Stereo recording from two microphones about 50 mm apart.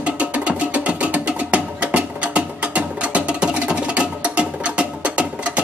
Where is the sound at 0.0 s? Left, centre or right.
Right.